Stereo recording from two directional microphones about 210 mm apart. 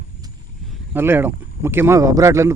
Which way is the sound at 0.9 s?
10° right (ahead or behind).